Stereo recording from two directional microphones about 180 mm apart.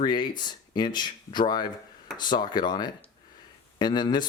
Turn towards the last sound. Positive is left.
turn(degrees=25)  # may be behind; listen again after turning